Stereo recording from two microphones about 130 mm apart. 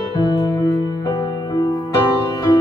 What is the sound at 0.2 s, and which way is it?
Music, 30° left (ahead or behind).